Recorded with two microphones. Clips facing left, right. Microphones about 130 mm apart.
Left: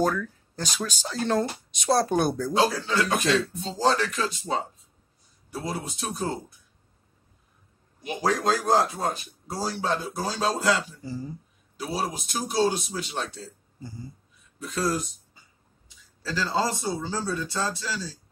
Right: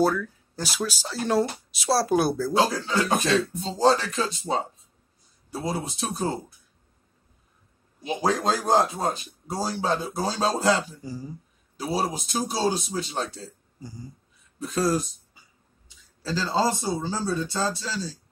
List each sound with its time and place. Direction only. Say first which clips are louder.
0.0 s speech: right 2 dB; 10° right (ahead or behind)
2.6 s speech: left 2 dB; 35° right (ahead or behind)
8.0 s speech: right 1 dB; 25° right (ahead or behind)
11.1 s speech: left 1 dB; 10° right (ahead or behind)
11.7 s a man's voice: right 3 dB; 35° right (ahead or behind)
13.7 s speech: even; 15° right (ahead or behind)
14.6 s a man's voice: right 3 dB; 30° right (ahead or behind)
16.3 s speech: right 2 dB; 25° right (ahead or behind)